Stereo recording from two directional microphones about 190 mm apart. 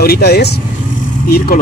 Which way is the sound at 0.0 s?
55° left (ahead or behind).